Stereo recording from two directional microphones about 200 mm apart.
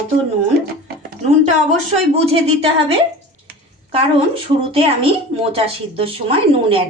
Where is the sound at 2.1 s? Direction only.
30° right (ahead or behind).